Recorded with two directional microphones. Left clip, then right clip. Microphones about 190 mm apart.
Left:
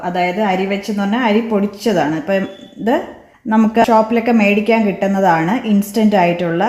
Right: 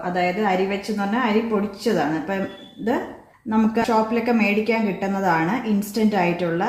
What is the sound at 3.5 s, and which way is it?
A woman's voice, 50° left (ahead or behind).